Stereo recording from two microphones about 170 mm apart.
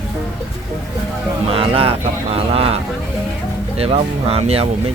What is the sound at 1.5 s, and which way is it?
Speech, 35° right (ahead or behind).